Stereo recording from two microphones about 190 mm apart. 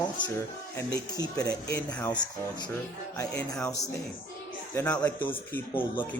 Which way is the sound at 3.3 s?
5° left (ahead or behind).